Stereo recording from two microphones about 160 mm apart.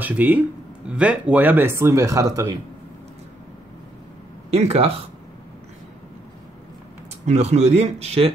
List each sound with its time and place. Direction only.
0.0 s speech: 10° right (ahead or behind)
4.5 s speech: 40° right (ahead or behind)
7.2 s a man's voice: 45° right (ahead or behind)